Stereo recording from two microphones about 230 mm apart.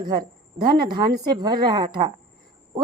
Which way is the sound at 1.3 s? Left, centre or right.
Centre.